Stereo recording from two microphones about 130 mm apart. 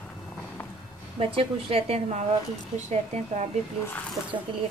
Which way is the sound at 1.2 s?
45° right (ahead or behind).